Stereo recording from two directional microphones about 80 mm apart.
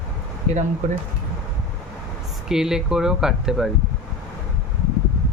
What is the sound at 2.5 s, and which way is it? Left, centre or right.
Speech, centre.